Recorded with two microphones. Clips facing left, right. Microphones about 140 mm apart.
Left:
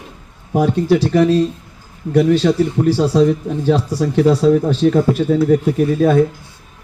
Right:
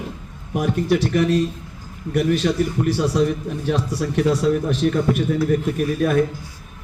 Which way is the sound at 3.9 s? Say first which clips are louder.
Left 6 dB; 35° left (ahead or behind).